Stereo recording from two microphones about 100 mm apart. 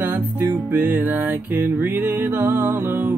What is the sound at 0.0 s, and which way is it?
Music, 20° right (ahead or behind).